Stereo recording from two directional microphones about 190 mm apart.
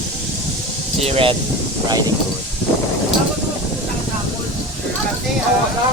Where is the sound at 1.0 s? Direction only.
30° right (ahead or behind).